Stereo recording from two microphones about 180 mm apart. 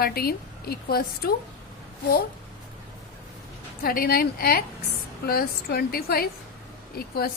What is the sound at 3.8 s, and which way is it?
A woman's voice, 55° left (ahead or behind).